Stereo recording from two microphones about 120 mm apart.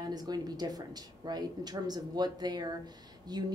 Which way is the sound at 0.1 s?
35° right (ahead or behind).